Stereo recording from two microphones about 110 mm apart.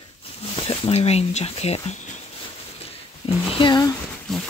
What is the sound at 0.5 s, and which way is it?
Speech, 55° left (ahead or behind).